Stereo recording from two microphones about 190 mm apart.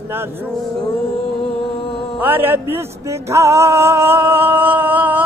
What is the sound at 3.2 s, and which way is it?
Music, 15° right (ahead or behind).